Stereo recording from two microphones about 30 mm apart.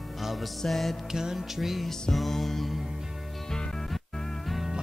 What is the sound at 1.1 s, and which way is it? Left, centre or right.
Music, centre.